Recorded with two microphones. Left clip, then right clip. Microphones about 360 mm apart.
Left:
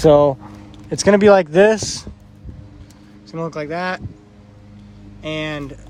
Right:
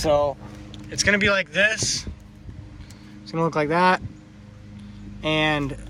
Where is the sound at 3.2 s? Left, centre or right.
Centre.